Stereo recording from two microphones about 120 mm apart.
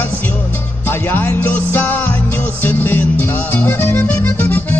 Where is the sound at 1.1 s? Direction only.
15° left (ahead or behind).